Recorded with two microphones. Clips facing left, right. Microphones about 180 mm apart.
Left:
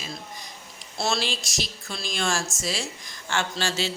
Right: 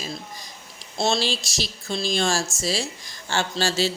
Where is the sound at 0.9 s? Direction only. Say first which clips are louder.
Right 4 dB; 25° right (ahead or behind).